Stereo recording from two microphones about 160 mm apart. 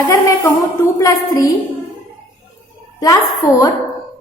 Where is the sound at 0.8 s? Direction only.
20° left (ahead or behind).